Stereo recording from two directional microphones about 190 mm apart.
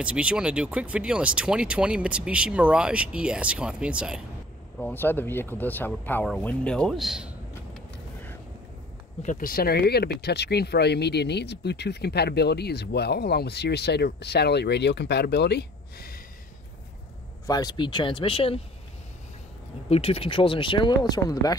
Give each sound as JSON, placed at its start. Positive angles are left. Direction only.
{"t": 0.0, "sound": "speech", "side_deg": -5}
{"t": 4.7, "sound": "speech", "side_deg": 10}
{"t": 9.2, "sound": "speech", "side_deg": 45}
{"t": 17.5, "sound": "speech", "side_deg": 20}
{"t": 19.9, "sound": "speech", "side_deg": 30}